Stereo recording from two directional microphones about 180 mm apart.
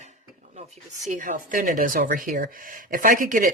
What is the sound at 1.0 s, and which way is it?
Speech, 45° right (ahead or behind).